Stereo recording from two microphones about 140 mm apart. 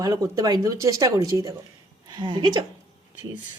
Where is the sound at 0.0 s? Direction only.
25° right (ahead or behind).